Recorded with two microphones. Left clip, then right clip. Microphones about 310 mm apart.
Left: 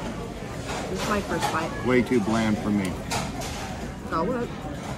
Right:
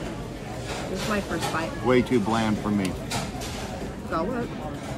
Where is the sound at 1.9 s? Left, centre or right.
Centre.